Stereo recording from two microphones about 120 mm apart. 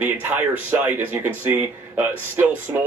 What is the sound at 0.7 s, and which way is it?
Speech, 15° right (ahead or behind).